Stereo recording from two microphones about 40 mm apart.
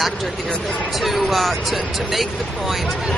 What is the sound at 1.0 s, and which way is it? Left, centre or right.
Speech, centre.